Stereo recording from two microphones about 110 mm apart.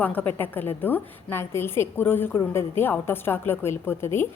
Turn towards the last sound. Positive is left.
turn(degrees=20)  # may be behind; listen again after turning